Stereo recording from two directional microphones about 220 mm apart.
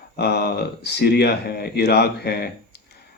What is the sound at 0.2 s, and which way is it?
Speech, 45° left (ahead or behind).